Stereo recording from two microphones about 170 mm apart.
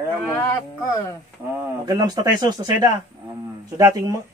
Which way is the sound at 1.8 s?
25° right (ahead or behind).